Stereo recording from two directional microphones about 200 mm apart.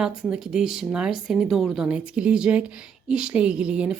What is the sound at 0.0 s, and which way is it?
A woman's voice, 5° right (ahead or behind).